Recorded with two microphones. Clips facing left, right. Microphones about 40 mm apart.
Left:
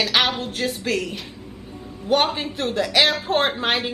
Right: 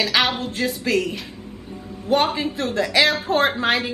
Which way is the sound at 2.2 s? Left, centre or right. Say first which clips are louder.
Right 2 dB; right.